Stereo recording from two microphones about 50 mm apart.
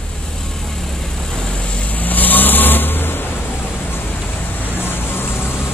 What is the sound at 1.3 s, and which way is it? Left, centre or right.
Vehicle, centre.